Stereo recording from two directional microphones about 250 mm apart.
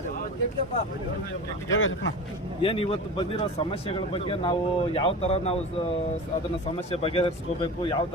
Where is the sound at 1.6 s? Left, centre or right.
Left.